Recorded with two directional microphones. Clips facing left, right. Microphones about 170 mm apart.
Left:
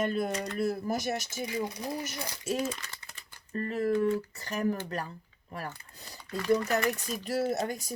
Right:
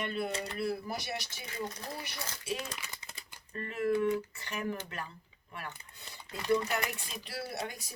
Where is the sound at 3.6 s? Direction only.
35° left (ahead or behind).